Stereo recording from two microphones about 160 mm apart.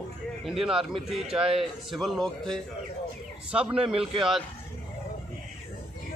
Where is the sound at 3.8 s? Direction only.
35° right (ahead or behind).